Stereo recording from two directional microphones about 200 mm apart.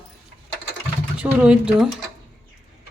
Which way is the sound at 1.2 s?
5° right (ahead or behind).